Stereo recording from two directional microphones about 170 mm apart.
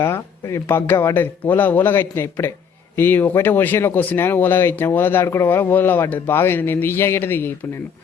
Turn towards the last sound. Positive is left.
turn(degrees=15)  # may be behind; listen again after turning